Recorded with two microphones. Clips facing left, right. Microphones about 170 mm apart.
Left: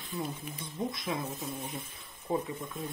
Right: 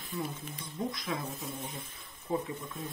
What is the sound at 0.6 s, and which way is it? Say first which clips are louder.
Speech: left 1 dB; 25° left (ahead or behind).